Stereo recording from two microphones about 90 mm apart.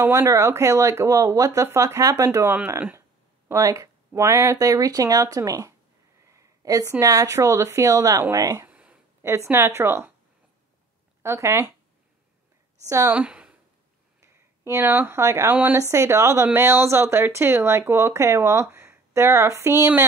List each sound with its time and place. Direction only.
0.0 s speech: 30° right (ahead or behind)
3.4 s speech: 35° right (ahead or behind)
6.2 s a sound: 35° right (ahead or behind)
7.0 s speech: 35° right (ahead or behind)
8.6 s a sound: 15° right (ahead or behind)
9.5 s a woman's voice: 25° right (ahead or behind)
11.2 s speech: 30° right (ahead or behind)
12.8 s speech: 35° right (ahead or behind)
13.1 s a sound: 15° right (ahead or behind)
14.2 s speech: 30° right (ahead or behind)
15.5 s a woman's voice: 20° right (ahead or behind)
15.9 s speech: 35° right (ahead or behind)